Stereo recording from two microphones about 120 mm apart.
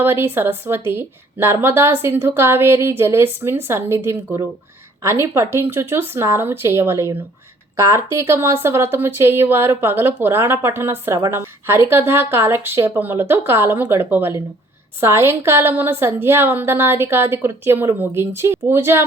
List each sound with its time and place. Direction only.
0.0 s a woman's voice: 20° right (ahead or behind)